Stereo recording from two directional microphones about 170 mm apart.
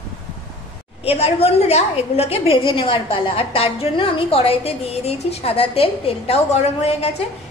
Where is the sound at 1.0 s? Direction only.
35° left (ahead or behind).